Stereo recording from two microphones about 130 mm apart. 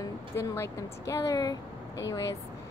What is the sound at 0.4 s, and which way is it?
A woman's voice, 25° left (ahead or behind).